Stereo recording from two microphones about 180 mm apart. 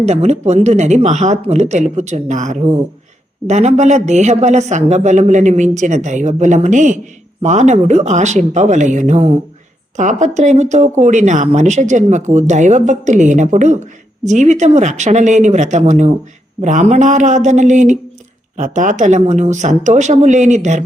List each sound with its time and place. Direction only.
0.0 s speech: 35° right (ahead or behind)